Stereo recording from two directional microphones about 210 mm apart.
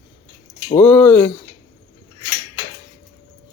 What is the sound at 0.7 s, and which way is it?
Cutlery, 10° left (ahead or behind).